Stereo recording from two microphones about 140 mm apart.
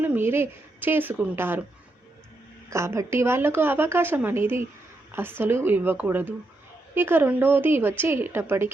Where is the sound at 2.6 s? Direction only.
20° right (ahead or behind).